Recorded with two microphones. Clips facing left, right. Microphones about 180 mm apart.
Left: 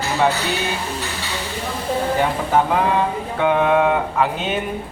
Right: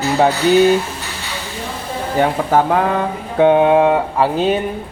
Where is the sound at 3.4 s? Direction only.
30° right (ahead or behind).